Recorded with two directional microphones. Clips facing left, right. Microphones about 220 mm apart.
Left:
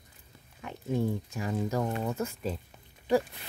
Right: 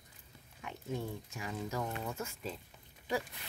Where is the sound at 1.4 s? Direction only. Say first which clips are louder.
Left 7 dB; 45° left (ahead or behind).